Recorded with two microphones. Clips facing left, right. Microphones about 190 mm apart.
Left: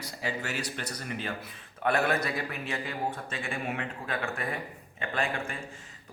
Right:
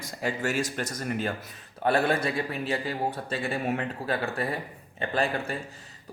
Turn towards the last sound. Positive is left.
turn(degrees=-35)  # may be behind; listen again after turning